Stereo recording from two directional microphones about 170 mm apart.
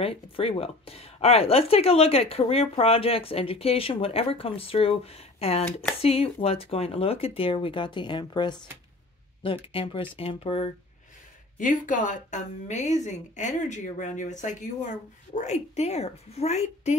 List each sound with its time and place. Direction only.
0.0 s speech: 35° left (ahead or behind)
11.5 s a woman's voice: 50° left (ahead or behind)